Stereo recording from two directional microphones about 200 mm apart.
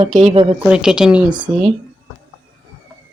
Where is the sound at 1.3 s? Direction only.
25° right (ahead or behind).